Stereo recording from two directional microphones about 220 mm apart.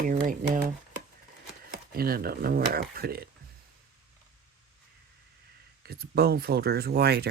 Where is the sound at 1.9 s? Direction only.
45° right (ahead or behind).